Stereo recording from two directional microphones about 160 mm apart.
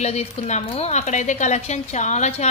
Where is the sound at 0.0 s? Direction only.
40° left (ahead or behind).